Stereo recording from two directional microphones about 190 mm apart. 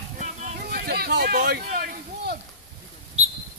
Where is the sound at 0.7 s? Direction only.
55° right (ahead or behind).